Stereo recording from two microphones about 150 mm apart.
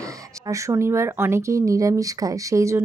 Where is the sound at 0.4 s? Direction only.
20° right (ahead or behind).